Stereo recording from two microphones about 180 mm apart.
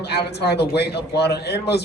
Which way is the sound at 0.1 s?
65° left (ahead or behind).